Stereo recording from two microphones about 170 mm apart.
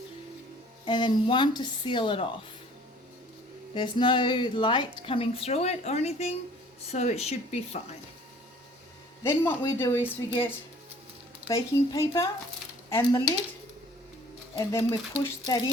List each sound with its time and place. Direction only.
0.9 s a woman's voice: 25° left (ahead or behind)
3.8 s a woman's voice: 25° left (ahead or behind)
9.2 s a woman's voice: 15° left (ahead or behind)
14.5 s a woman's voice: 20° left (ahead or behind)